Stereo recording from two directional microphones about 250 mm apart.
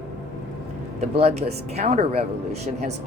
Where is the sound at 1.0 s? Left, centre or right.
Right.